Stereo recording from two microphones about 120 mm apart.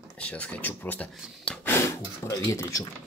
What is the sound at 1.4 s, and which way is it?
Snort, 10° left (ahead or behind).